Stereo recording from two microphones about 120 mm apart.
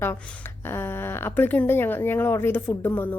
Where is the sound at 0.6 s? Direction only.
20° left (ahead or behind).